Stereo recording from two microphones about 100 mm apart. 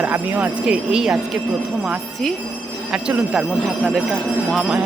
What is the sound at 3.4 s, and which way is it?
Speech, centre (ahead or behind).